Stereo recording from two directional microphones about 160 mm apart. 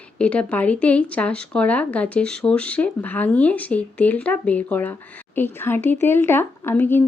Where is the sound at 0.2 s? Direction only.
10° left (ahead or behind).